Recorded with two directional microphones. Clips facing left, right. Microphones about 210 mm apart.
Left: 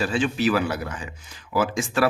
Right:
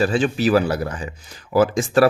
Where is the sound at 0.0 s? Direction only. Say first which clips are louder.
Right 4 dB; 40° right (ahead or behind).